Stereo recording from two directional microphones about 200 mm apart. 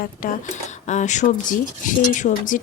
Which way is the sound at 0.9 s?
35° left (ahead or behind).